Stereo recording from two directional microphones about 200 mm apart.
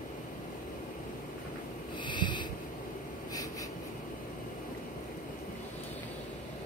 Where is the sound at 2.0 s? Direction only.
25° left (ahead or behind).